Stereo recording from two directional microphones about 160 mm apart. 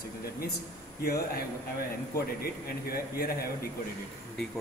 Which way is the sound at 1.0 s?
70° left (ahead or behind).